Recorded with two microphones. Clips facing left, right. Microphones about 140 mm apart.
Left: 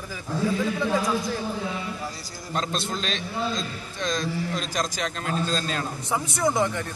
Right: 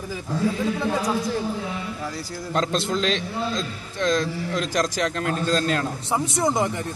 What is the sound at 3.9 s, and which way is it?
A man's voice, 60° right (ahead or behind).